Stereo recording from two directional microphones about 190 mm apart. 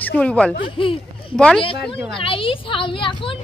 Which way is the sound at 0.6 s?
25° left (ahead or behind).